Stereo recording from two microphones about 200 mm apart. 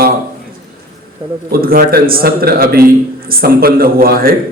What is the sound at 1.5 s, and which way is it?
A man's voice, 45° right (ahead or behind).